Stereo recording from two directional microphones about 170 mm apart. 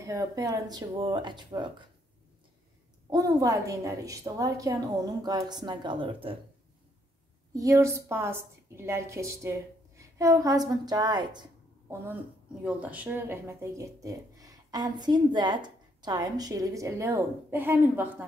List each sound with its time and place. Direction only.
0.0 s speech: 20° right (ahead or behind)
3.1 s speech: 20° right (ahead or behind)
7.5 s speech: 20° right (ahead or behind)
12.6 s speech: 10° right (ahead or behind)